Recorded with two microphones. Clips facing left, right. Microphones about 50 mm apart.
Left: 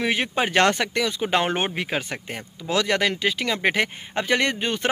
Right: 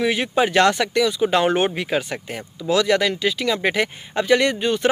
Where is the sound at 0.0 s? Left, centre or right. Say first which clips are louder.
Right 4 dB; left.